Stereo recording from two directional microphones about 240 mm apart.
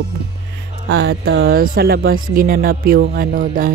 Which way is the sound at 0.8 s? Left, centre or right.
Right.